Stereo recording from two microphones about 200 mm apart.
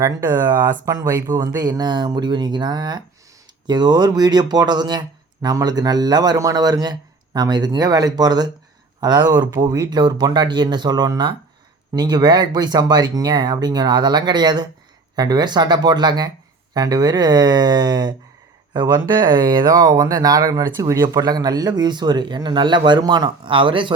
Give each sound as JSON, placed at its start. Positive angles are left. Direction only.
{"t": 0.0, "sound": "speech", "side_deg": -15}